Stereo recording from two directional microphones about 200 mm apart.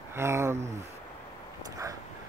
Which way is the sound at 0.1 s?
15° right (ahead or behind).